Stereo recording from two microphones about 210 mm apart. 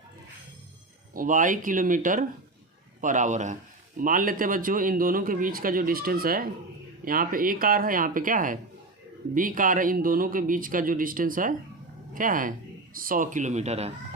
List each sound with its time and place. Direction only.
1.1 s speech: 40° right (ahead or behind)